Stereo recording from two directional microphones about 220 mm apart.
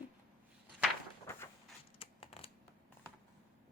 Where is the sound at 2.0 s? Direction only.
25° left (ahead or behind).